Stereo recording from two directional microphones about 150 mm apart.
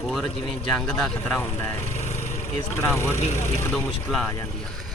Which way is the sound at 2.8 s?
15° left (ahead or behind).